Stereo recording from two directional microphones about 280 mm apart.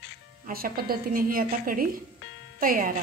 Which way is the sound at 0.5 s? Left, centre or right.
Right.